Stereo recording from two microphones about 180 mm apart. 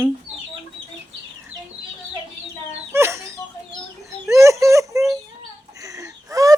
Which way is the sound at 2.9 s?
15° right (ahead or behind).